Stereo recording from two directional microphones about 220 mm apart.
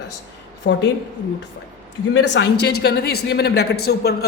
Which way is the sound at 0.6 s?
55° left (ahead or behind).